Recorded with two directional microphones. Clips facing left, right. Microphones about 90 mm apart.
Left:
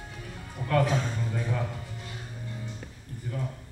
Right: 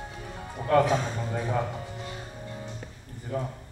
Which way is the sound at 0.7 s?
30° right (ahead or behind).